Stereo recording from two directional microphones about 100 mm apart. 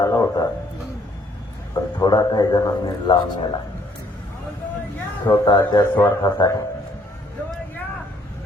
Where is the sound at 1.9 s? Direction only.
45° left (ahead or behind).